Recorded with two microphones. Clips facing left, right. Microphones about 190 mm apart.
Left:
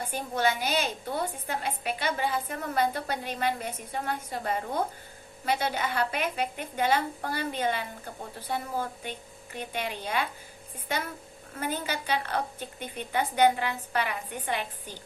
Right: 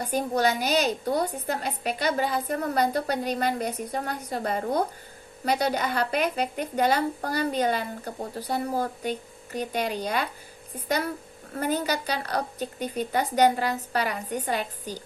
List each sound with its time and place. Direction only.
0.0 s a woman's voice: 40° right (ahead or behind)